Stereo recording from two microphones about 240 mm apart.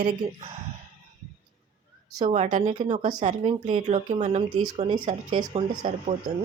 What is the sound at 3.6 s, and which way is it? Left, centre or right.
Speech, right.